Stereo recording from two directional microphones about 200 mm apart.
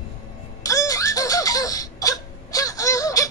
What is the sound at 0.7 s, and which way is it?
Wail, 15° left (ahead or behind).